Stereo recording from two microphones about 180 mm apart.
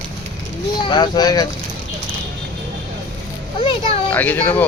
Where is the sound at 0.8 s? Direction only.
25° left (ahead or behind).